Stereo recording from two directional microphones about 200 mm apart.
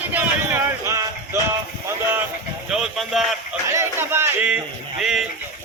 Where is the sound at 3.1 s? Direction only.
Centre (ahead or behind).